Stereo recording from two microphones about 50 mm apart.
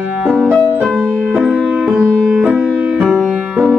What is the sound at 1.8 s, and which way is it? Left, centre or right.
Music, centre.